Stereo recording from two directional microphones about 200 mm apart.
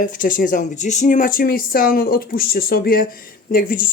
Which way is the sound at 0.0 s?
40° left (ahead or behind).